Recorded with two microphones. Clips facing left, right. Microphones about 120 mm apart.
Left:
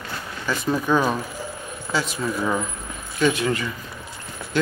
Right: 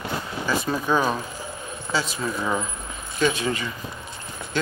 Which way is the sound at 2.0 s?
10° left (ahead or behind).